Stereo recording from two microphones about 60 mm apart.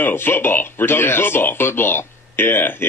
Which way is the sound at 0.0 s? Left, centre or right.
Left.